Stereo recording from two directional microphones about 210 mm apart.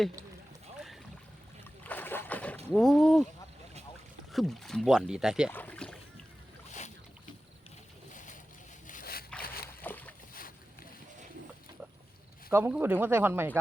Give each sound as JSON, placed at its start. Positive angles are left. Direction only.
{"t": 1.8, "sound": "boat", "side_deg": 10}
{"t": 2.7, "sound": "speech", "side_deg": 0}
{"t": 4.3, "sound": "speech", "side_deg": 0}
{"t": 5.5, "sound": "speech", "side_deg": 5}
{"t": 8.1, "sound": "boat", "side_deg": 35}
{"t": 8.9, "sound": "zipper", "side_deg": 45}
{"t": 9.8, "sound": "boat", "side_deg": 10}
{"t": 12.5, "sound": "speech", "side_deg": -10}